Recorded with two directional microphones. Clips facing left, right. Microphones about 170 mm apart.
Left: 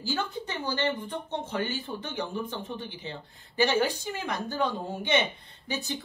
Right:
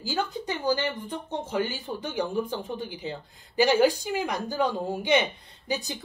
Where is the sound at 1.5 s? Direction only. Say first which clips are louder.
Right 4 dB; 10° right (ahead or behind).